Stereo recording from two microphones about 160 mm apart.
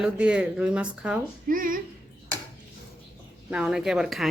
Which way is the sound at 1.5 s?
60° right (ahead or behind).